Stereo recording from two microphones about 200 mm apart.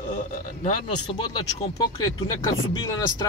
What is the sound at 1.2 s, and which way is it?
Speech, 20° left (ahead or behind).